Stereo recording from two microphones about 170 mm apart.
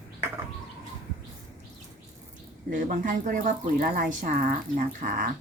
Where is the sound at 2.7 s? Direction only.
50° right (ahead or behind).